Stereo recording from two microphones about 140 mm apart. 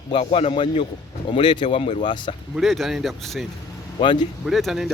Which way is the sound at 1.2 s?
35° left (ahead or behind).